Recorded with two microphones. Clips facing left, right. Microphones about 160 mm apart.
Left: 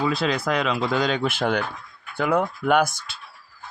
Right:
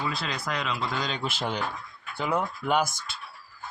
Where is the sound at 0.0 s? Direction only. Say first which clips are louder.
Left 9 dB; 90° left; by 2.9 s 55° left (ahead or behind).